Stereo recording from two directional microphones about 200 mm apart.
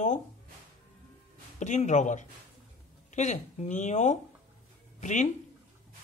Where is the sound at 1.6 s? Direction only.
35° left (ahead or behind).